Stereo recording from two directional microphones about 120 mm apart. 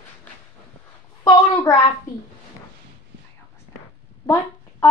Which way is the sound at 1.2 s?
35° left (ahead or behind).